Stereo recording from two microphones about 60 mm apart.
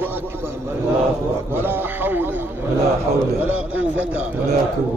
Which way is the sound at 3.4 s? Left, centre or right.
Right.